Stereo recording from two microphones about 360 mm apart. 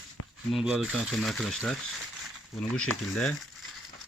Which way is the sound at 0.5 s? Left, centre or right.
Centre.